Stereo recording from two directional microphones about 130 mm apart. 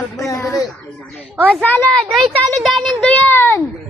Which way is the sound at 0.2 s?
25° left (ahead or behind).